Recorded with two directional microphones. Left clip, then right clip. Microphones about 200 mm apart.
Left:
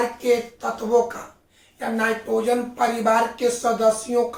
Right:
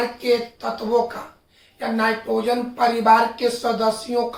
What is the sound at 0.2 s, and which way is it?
Speech, 20° right (ahead or behind).